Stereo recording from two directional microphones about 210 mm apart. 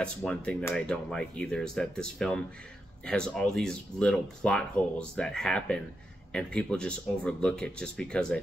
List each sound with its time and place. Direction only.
0.0 s speech: 5° left (ahead or behind)